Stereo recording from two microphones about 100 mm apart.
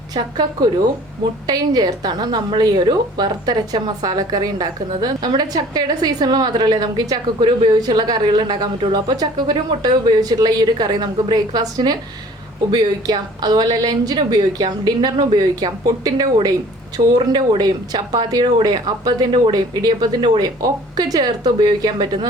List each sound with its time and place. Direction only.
0.1 s speech: 45° right (ahead or behind)